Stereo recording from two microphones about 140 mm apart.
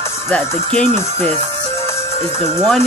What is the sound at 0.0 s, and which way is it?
Music, 20° left (ahead or behind).